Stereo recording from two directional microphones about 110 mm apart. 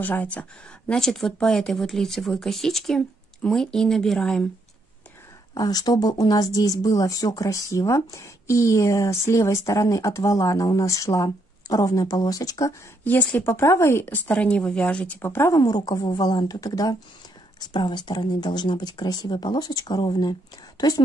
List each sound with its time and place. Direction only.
0.0 s speech: 15° left (ahead or behind)
5.5 s speech: 35° left (ahead or behind)
13.0 s speech: 15° left (ahead or behind)
15.6 s speech: 40° left (ahead or behind)